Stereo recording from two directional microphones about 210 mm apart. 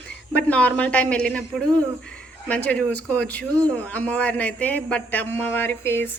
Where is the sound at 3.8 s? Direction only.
5° left (ahead or behind).